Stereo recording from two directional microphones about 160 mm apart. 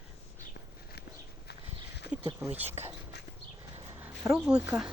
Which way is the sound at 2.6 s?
40° right (ahead or behind).